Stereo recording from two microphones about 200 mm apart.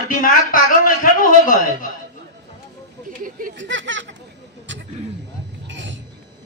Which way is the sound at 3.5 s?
65° right (ahead or behind).